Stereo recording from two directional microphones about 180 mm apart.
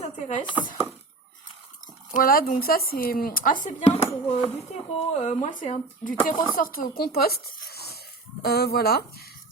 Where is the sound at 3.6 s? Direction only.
35° left (ahead or behind).